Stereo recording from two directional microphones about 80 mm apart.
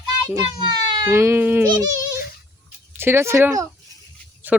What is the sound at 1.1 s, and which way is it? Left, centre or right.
Speech, right.